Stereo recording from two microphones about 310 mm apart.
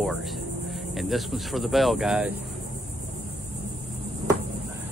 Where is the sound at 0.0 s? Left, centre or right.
Centre.